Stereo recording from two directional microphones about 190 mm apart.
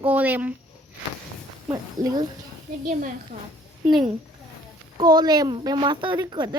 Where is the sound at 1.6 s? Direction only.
15° right (ahead or behind).